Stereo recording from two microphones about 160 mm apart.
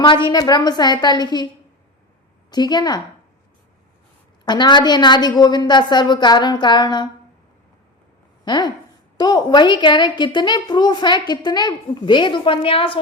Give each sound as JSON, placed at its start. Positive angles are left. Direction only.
{"t": 0.0, "sound": "a woman's voice", "side_deg": 30}
{"t": 2.5, "sound": "a woman's voice", "side_deg": 25}
{"t": 4.4, "sound": "a woman's voice", "side_deg": 25}
{"t": 8.4, "sound": "a woman's voice", "side_deg": 25}